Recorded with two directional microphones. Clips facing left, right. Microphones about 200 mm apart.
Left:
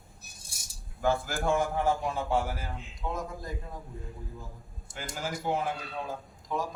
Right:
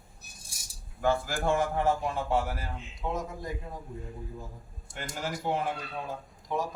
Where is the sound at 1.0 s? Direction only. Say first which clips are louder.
Right 1 dB; centre (ahead or behind).